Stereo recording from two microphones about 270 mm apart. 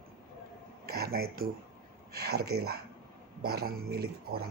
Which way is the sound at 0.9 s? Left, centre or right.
Right.